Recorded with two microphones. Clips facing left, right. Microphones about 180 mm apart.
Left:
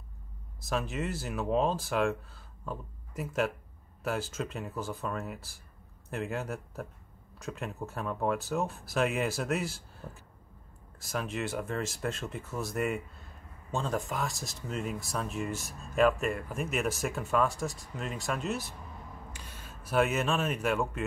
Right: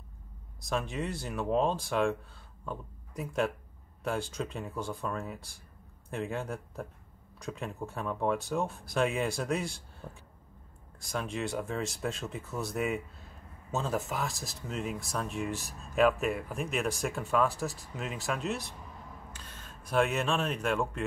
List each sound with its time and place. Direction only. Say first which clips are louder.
0.6 s speech: even; 5° left (ahead or behind)